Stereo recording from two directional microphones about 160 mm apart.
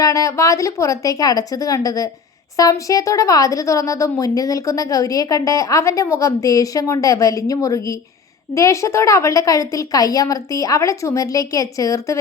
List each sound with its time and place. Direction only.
0.0 s speech: 20° left (ahead or behind)